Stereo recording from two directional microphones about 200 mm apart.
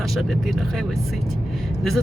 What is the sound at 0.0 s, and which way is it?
Speech, centre (ahead or behind).